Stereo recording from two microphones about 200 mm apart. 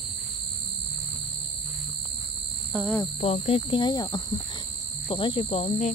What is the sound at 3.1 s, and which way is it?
Speech, 30° left (ahead or behind).